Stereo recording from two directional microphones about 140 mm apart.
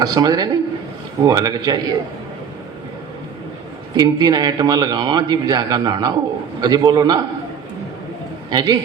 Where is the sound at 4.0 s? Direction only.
30° right (ahead or behind).